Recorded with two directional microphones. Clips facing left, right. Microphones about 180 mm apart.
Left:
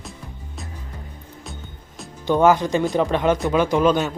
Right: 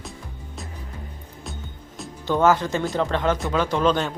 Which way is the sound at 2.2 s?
15° left (ahead or behind).